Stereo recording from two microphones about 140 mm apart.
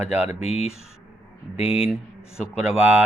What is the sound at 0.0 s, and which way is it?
Speech, 10° right (ahead or behind).